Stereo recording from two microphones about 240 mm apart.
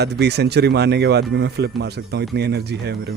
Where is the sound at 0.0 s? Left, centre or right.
Right.